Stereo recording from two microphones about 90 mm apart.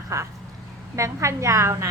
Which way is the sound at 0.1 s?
35° right (ahead or behind).